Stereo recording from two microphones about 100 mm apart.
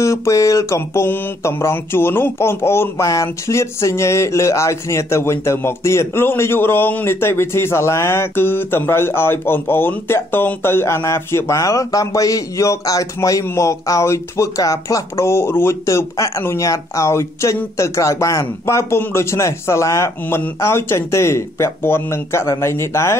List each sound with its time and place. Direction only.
0.0 s mantra: 30° left (ahead or behind)